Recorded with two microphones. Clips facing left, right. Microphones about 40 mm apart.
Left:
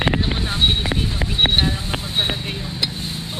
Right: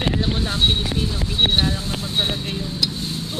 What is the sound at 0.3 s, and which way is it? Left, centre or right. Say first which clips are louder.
Vehicle: left 1 dB; left.